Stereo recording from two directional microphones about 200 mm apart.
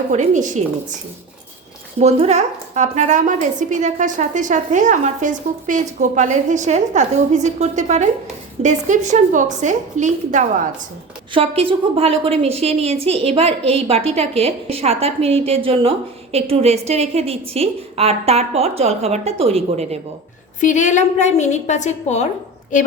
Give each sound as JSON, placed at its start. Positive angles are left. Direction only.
{"t": 0.1, "sound": "a woman's voice", "side_deg": -40}
{"t": 2.0, "sound": "a woman's voice", "side_deg": -30}
{"t": 11.3, "sound": "a woman's voice", "side_deg": -25}
{"t": 20.6, "sound": "a woman's voice", "side_deg": 40}